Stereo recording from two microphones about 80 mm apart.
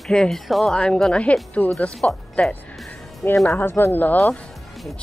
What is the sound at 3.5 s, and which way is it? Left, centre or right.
Speech, left.